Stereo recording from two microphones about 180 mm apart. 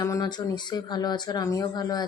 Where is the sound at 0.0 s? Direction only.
20° left (ahead or behind).